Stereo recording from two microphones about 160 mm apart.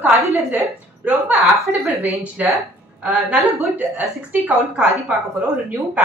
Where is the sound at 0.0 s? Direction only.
15° right (ahead or behind).